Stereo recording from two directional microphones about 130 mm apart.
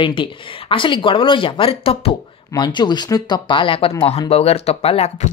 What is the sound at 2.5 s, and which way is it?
Speech, 35° left (ahead or behind).